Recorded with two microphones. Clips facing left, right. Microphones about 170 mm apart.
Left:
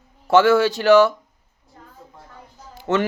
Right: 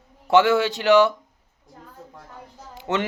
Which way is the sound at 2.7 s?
20° right (ahead or behind).